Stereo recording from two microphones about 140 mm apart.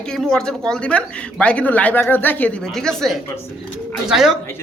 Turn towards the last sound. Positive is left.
turn(degrees=0)  # may be behind; listen again after turning